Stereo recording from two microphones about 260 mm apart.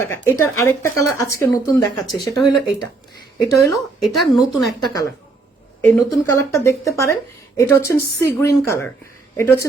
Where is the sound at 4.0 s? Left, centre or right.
Centre.